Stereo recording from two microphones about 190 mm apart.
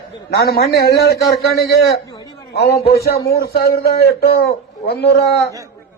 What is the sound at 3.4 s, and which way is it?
A man's voice, 55° left (ahead or behind).